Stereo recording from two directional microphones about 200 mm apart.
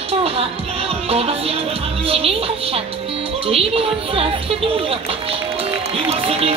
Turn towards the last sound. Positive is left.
turn(degrees=-30)  # may be behind; listen again after turning